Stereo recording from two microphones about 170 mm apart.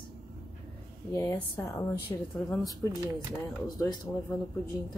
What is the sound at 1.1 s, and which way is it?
Speech, 15° left (ahead or behind).